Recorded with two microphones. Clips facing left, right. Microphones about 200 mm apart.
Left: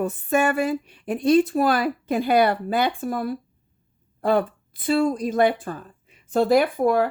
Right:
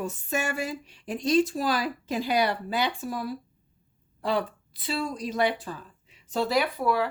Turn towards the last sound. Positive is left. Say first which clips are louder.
# left 7 dB
turn(degrees=50)  # may be behind; listen again after turning